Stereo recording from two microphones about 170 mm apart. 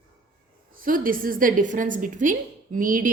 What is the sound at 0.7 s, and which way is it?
A woman's voice, 55° right (ahead or behind).